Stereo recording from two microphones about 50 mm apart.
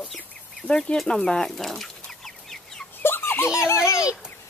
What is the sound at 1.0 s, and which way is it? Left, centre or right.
Chicken, centre.